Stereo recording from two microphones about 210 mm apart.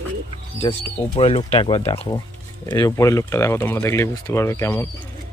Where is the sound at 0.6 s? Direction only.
30° left (ahead or behind).